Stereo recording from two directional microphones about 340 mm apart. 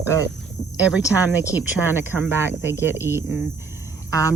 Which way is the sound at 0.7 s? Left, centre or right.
Centre.